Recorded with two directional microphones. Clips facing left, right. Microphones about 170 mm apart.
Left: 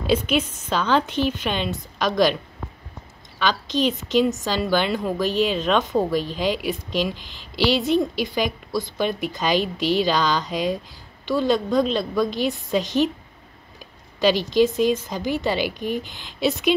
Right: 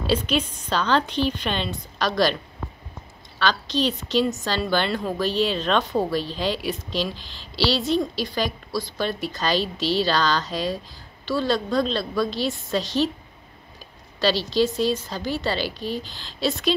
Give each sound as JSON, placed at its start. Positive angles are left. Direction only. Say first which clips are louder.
{"t": 0.1, "sound": "a woman's voice", "louder": "left 3 dB", "side_deg": 10}
{"t": 3.3, "sound": "a woman's voice", "louder": "left 1 dB", "side_deg": 15}
{"t": 14.2, "sound": "a woman's voice", "louder": "left 3 dB", "side_deg": 15}